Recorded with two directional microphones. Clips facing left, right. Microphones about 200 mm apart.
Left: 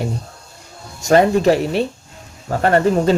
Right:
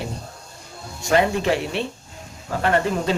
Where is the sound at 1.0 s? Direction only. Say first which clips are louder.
Left 7 dB; 40° left (ahead or behind).